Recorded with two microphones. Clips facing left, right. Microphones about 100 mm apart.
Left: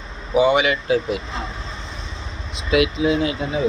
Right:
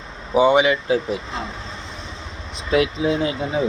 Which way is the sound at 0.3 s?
25° right (ahead or behind).